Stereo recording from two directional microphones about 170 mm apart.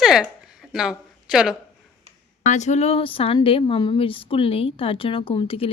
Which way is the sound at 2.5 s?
40° left (ahead or behind).